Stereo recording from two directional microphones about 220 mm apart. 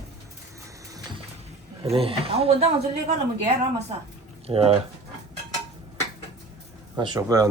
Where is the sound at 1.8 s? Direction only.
25° right (ahead or behind).